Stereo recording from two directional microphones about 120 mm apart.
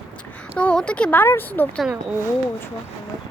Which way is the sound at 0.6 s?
10° left (ahead or behind).